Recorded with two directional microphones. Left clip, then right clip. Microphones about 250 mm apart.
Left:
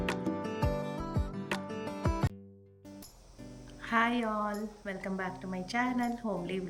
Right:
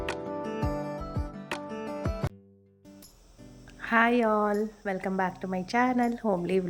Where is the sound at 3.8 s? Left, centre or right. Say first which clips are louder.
Right 6 dB; centre.